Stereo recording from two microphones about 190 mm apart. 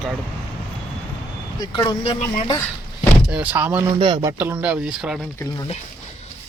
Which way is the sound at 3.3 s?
10° right (ahead or behind).